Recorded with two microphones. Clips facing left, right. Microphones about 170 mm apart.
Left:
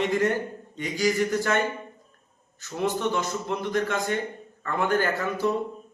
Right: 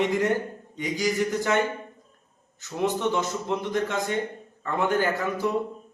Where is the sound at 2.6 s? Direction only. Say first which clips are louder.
Right 1 dB; 20° right (ahead or behind).